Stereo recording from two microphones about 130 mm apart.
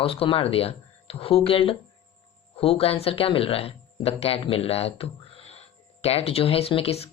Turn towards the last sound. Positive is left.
turn(degrees=50)  # may be behind; listen again after turning